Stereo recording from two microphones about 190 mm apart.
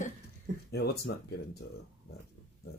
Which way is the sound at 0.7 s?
55° left (ahead or behind).